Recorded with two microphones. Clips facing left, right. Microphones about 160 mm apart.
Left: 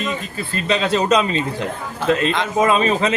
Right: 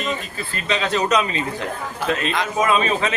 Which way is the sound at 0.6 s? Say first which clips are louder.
Left 3 dB; 30° left (ahead or behind).